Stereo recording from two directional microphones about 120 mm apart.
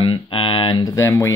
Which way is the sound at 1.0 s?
25° left (ahead or behind).